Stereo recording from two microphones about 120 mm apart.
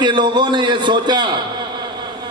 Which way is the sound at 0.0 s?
40° right (ahead or behind).